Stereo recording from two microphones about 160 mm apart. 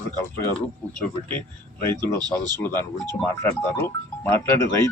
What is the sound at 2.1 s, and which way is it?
Speech, 25° right (ahead or behind).